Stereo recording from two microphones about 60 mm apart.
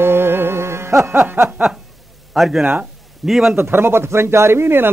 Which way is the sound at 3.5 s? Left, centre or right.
Right.